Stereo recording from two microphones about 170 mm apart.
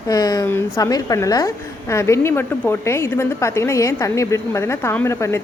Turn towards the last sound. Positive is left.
turn(degrees=15)  # may be behind; listen again after turning